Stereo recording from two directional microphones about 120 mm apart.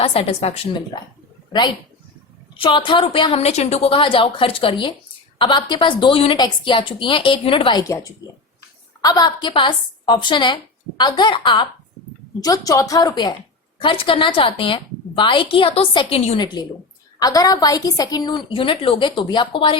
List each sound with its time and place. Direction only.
0.0 s a woman's voice: 55° left (ahead or behind)
2.6 s a woman's voice: 45° left (ahead or behind)
3.4 s a woman's voice: 65° left (ahead or behind); by 7.8 s 45° left (ahead or behind)
7.8 s a woman's voice: 25° left (ahead or behind)
12.4 s a woman's voice: 30° left (ahead or behind)
13.8 s a woman's voice: 45° left (ahead or behind)
17.2 s a woman's voice: 30° left (ahead or behind)